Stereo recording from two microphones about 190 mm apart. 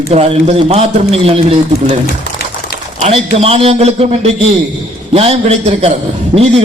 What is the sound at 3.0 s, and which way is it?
A man's voice, 30° right (ahead or behind).